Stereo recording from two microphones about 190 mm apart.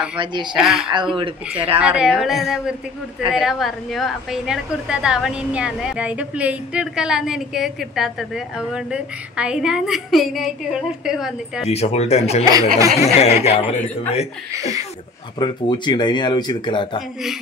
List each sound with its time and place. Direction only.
0.2 s speech: 25° right (ahead or behind)
0.6 s a woman's voice: 5° right (ahead or behind)
1.1 s speech: 30° right (ahead or behind)
1.8 s a woman's voice: 5° right (ahead or behind)
11.6 s speech: 35° left (ahead or behind)
12.4 s speech: 20° right (ahead or behind)
13.0 s speech: 35° left (ahead or behind)
15.3 s speech: 25° left (ahead or behind)